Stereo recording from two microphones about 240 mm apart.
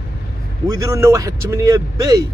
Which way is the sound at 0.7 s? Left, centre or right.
Centre.